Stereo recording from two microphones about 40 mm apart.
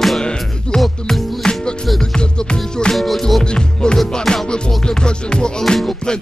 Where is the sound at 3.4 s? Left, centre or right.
Left.